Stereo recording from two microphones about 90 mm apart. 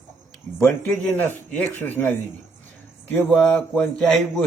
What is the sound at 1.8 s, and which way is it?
Speech, 25° left (ahead or behind).